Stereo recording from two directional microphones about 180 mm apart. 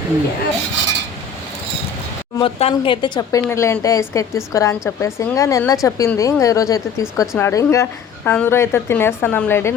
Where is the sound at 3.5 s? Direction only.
15° left (ahead or behind).